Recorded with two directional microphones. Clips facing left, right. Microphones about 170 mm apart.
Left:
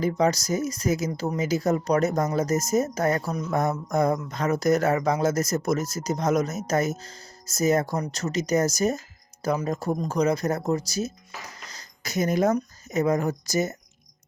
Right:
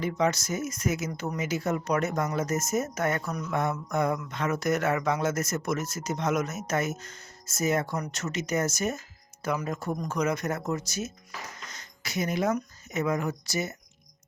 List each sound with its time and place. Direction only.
0.0 s speech: 35° left (ahead or behind)